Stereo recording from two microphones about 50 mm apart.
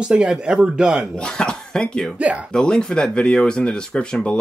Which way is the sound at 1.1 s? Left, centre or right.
Centre.